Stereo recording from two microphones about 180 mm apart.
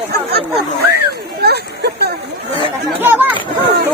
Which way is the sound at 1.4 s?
60° right (ahead or behind).